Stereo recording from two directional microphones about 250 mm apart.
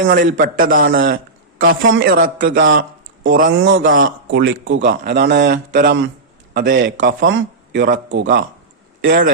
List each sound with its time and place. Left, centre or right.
0.1 s a man's voice: right
3.2 s a man's voice: right
3.6 s a man's voice: right
3.8 s a man's voice: right
4.3 s a man's voice: right
7.3 s a man's voice: right